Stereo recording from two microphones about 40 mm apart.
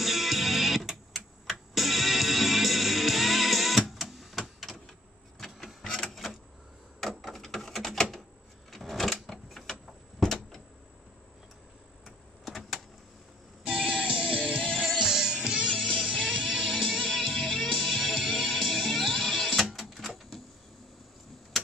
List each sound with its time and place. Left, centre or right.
0.0 s music: centre
7.0 s a sound: centre
8.7 s sewing machine: centre
10.2 s a sound: centre
12.0 s a sound: centre
13.8 s music: right
15.7 s music: centre
16.3 s music: centre
17.0 s music: centre